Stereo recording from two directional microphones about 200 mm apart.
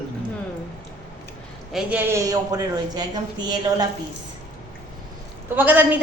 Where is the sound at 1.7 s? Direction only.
10° right (ahead or behind).